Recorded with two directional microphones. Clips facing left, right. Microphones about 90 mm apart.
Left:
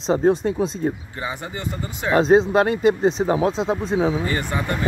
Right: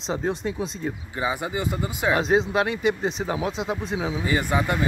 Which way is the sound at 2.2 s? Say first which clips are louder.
Left 9 dB; 40° left (ahead or behind).